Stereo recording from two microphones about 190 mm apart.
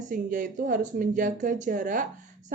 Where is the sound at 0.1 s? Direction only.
45° right (ahead or behind).